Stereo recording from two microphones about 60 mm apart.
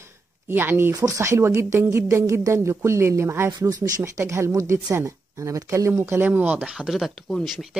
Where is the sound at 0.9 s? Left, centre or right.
Right.